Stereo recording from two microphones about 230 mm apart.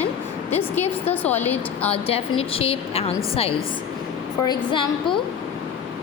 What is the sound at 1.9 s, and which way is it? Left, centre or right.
A woman's voice, left.